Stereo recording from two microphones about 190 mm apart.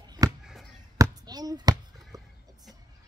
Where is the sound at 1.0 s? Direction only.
20° right (ahead or behind).